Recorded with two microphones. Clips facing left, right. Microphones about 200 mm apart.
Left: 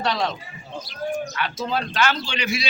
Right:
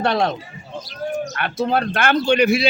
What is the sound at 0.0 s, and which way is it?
Speech, 55° right (ahead or behind).